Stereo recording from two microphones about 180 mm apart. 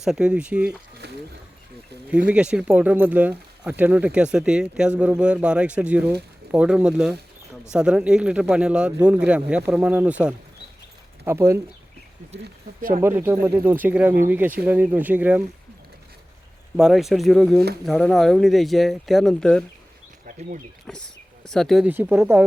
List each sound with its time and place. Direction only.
0.0 s speech: 5° right (ahead or behind)
1.0 s a sound: 65° right (ahead or behind)
2.0 s speech: 10° right (ahead or behind)
13.0 s speech: 10° right (ahead or behind)
16.7 s speech: centre (ahead or behind)
20.9 s speech: 5° left (ahead or behind)
21.8 s speech: 10° right (ahead or behind)